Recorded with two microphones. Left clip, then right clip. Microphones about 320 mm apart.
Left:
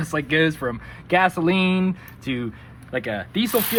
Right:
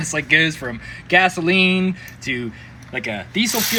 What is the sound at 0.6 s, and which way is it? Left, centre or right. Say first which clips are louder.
Speech: left 1 dB; centre.